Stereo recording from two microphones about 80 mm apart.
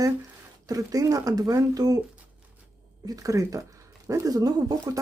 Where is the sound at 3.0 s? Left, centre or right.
Right.